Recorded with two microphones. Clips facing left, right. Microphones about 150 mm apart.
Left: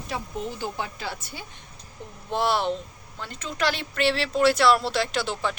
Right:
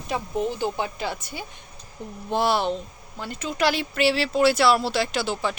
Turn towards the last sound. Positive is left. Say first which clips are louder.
# right 1 dB
turn(degrees=0)  # may be behind; listen again after turning